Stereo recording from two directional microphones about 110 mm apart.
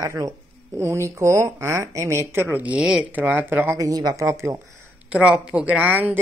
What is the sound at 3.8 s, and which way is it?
Speech, 35° right (ahead or behind).